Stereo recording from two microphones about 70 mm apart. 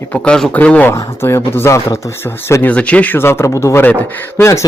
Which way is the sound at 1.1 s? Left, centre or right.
Left.